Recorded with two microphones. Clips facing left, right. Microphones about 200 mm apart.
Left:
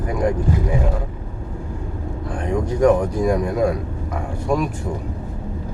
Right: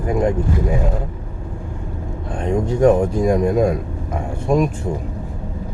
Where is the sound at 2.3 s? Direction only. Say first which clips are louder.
Right 3 dB; 25° right (ahead or behind).